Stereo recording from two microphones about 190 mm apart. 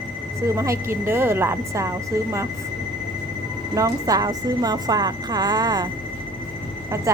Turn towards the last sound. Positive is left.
turn(degrees=-15)  # may be behind; listen again after turning